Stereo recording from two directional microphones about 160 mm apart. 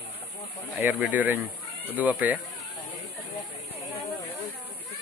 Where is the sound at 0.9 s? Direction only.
10° right (ahead or behind).